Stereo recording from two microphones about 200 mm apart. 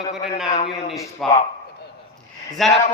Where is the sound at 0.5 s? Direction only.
35° left (ahead or behind).